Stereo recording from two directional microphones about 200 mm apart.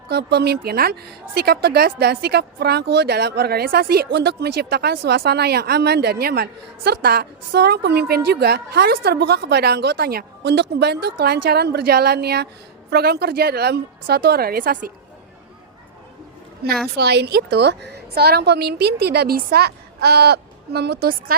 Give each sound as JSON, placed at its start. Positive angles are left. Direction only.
{"t": 0.1, "sound": "a woman's voice", "side_deg": -55}
{"t": 16.6, "sound": "a woman's voice", "side_deg": -50}